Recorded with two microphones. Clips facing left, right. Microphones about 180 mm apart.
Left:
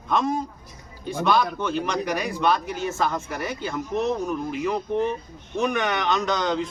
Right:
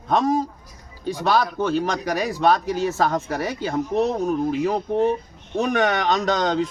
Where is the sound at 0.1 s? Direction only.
40° right (ahead or behind).